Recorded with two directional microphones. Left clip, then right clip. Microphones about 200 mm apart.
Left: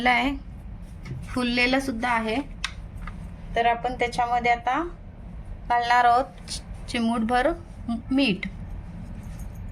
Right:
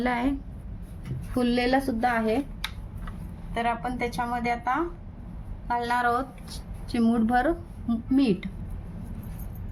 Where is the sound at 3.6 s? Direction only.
15° left (ahead or behind); by 8.5 s centre (ahead or behind).